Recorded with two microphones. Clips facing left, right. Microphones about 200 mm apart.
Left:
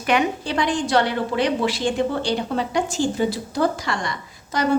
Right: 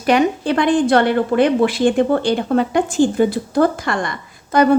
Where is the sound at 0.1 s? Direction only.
35° right (ahead or behind).